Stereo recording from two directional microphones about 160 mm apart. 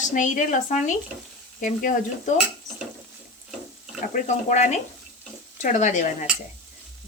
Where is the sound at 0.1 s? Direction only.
50° left (ahead or behind).